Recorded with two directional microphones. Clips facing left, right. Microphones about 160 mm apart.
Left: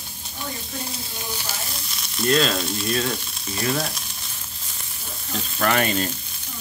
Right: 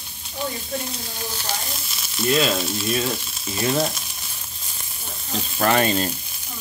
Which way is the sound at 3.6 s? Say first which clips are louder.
Right 3 dB; 20° right (ahead or behind).